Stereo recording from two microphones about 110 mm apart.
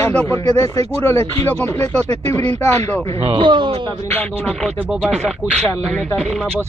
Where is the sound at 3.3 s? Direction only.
45° right (ahead or behind).